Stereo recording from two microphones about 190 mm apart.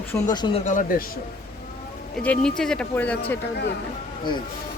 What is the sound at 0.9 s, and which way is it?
Speech, 50° left (ahead or behind).